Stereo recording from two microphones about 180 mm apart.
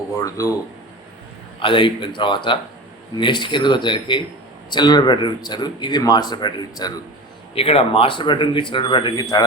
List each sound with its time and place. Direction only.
0.2 s speech: 20° left (ahead or behind)
1.5 s speech: 30° left (ahead or behind)
7.5 s speech: 35° left (ahead or behind)